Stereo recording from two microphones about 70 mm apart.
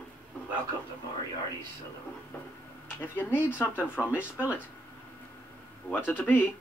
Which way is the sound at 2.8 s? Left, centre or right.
Left.